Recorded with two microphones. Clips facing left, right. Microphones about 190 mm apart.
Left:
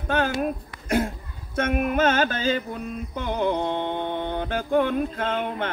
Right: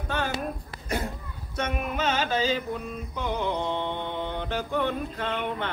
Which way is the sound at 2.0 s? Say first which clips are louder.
Left 1 dB; 50° left (ahead or behind).